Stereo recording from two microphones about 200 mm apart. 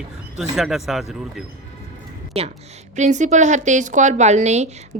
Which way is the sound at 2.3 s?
30° right (ahead or behind).